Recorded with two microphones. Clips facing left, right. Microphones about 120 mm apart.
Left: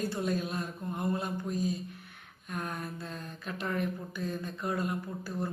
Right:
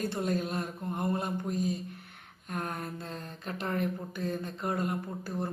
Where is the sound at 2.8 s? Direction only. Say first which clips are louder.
Right 1 dB; 25° right (ahead or behind).